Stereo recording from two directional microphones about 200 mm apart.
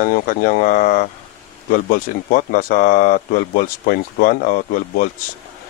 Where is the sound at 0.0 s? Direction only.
45° left (ahead or behind).